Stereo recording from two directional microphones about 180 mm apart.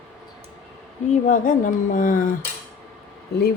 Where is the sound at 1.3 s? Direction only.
45° left (ahead or behind).